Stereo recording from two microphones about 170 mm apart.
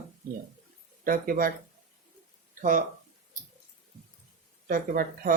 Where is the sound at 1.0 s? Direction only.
60° right (ahead or behind).